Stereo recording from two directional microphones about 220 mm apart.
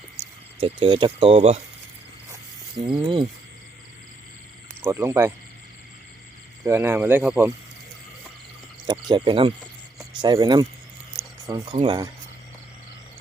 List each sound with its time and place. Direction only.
0.2 s speech: 25° right (ahead or behind)
2.8 s speech: 20° right (ahead or behind)
4.8 s speech: 10° right (ahead or behind)
6.7 s speech: 10° right (ahead or behind)
8.9 s speech: 20° right (ahead or behind)